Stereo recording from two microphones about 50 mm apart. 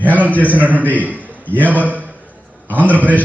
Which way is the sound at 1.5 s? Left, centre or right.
Right.